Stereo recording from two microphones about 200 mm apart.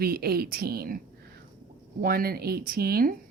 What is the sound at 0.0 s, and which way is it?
Speech, 50° right (ahead or behind).